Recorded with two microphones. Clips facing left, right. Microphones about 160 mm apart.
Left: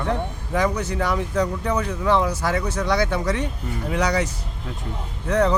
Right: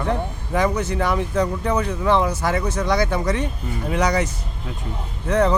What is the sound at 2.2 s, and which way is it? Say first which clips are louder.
A man's voice: right 1 dB; 50° right (ahead or behind).